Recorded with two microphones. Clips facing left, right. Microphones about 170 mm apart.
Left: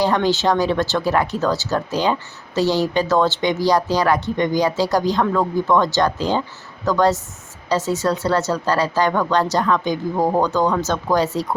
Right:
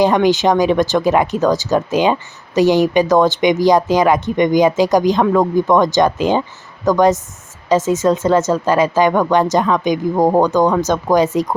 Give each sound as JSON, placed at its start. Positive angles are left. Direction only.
{"t": 0.0, "sound": "speech", "side_deg": -15}